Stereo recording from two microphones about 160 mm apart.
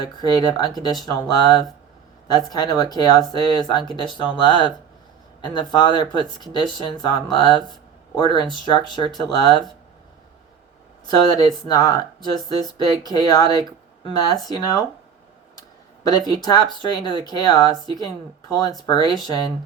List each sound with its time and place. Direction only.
0.0 s speech: 25° left (ahead or behind)
7.7 s a sound: 25° left (ahead or behind)
8.6 s speech: 25° left (ahead or behind)
11.3 s speech: 25° left (ahead or behind)
16.3 s speech: 25° left (ahead or behind)